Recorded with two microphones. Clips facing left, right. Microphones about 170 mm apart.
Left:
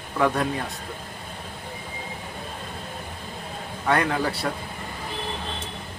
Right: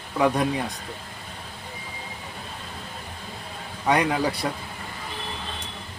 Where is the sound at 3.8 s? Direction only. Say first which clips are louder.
Right 1 dB; 15° right (ahead or behind).